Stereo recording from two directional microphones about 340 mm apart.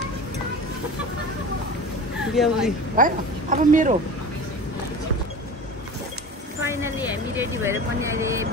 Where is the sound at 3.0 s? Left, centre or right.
Right.